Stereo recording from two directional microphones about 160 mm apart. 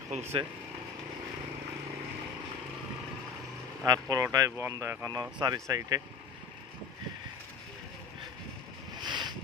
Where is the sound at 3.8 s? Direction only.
20° right (ahead or behind).